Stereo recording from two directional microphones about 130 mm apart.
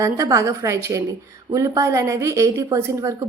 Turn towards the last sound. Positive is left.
turn(degrees=-25)  # may be behind; listen again after turning